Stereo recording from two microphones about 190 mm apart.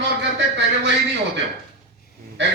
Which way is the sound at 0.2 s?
70° right (ahead or behind).